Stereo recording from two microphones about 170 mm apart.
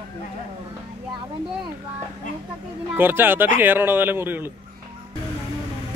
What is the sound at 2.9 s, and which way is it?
Speech, 10° right (ahead or behind).